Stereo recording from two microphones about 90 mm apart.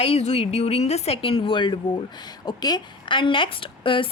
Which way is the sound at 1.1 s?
90° left.